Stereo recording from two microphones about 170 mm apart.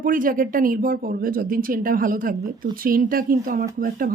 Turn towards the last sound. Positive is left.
turn(degrees=-55)  # may be behind; listen again after turning